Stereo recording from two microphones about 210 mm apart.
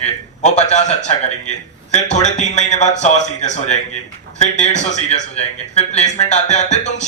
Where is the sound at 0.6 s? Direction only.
35° left (ahead or behind).